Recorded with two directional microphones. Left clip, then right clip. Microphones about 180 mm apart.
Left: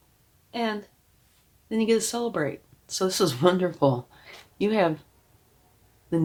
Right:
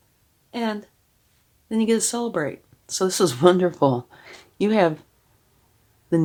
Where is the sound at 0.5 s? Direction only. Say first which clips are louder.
Right 1 dB; 50° right (ahead or behind).